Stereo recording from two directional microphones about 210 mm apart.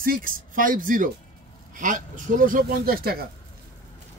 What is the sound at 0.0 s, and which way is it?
Speech, 40° right (ahead or behind).